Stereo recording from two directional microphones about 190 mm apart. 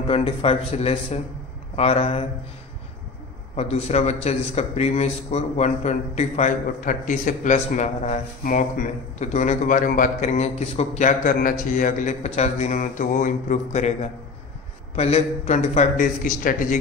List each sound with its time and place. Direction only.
0.0 s a man's voice: 30° left (ahead or behind)
3.5 s a man's voice: 35° left (ahead or behind)
15.0 s a man's voice: 35° left (ahead or behind)